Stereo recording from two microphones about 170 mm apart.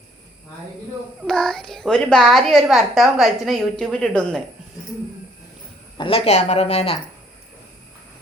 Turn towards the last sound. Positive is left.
turn(degrees=35)  # may be behind; listen again after turning